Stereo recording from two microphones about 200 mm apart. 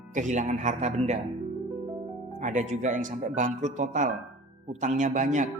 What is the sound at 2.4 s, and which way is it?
Speech, 35° right (ahead or behind).